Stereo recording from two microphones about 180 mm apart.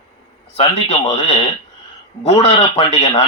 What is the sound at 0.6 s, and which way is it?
Speech, 30° left (ahead or behind).